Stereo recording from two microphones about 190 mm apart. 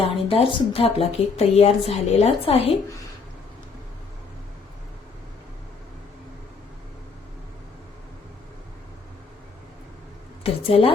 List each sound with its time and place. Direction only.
0.0 s speech: 30° left (ahead or behind)
10.4 s a woman's voice: 30° left (ahead or behind)